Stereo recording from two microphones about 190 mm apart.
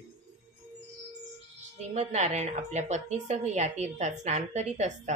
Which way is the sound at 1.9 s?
35° right (ahead or behind).